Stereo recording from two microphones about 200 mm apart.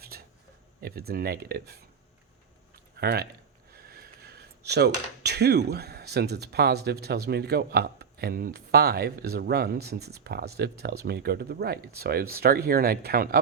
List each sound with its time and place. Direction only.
0.1 s a sound: 50° right (ahead or behind)
0.8 s speech: 50° right (ahead or behind)
3.0 s speech: 50° right (ahead or behind)